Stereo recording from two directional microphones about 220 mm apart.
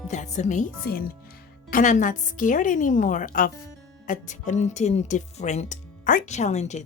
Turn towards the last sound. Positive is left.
turn(degrees=30)  # may be behind; listen again after turning